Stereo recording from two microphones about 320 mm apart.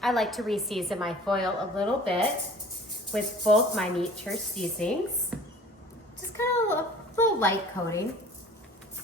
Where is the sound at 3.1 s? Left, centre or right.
Centre.